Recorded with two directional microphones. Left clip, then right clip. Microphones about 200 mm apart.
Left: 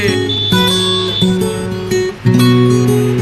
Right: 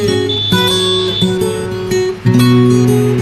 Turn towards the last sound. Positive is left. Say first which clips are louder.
# right 1 dB
turn(degrees=0)  # may be behind; listen again after turning